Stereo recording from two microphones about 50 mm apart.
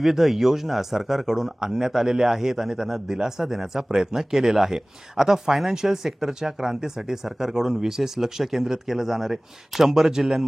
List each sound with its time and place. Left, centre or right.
0.0 s speech: centre